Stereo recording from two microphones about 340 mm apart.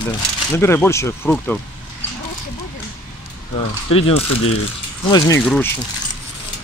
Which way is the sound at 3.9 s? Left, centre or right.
Centre.